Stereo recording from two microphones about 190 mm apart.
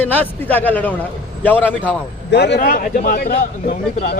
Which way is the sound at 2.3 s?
65° left (ahead or behind).